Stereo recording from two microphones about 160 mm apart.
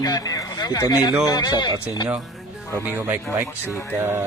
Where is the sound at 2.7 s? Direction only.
15° right (ahead or behind).